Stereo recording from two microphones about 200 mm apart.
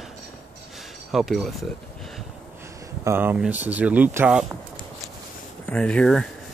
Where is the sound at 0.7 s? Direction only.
Centre (ahead or behind).